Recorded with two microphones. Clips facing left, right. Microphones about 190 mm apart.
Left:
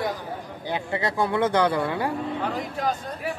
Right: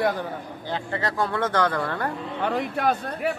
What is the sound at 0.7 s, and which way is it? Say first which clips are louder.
Speech: left 1 dB; 15° left (ahead or behind).